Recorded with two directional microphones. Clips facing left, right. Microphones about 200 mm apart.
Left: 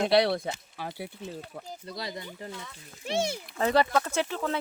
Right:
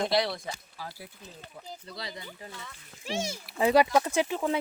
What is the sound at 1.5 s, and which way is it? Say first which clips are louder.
Speech: left 4 dB; 45° left (ahead or behind).